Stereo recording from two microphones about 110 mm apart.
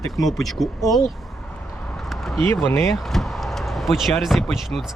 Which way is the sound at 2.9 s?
Centre (ahead or behind).